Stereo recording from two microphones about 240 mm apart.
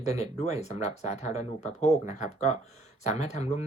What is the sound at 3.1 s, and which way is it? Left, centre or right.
Speech, left.